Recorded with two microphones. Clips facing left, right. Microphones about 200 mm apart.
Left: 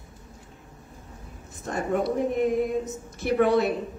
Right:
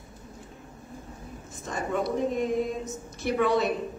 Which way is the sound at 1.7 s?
55° left (ahead or behind).